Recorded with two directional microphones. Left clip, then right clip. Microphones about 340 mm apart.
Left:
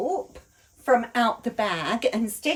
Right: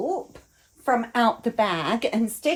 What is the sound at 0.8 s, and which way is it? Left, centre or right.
Speech, centre.